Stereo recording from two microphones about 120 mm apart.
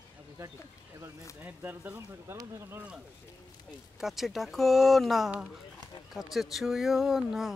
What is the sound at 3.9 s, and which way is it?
Speech, centre (ahead or behind).